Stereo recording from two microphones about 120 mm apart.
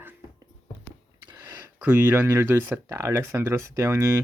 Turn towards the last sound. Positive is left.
turn(degrees=-20)  # may be behind; listen again after turning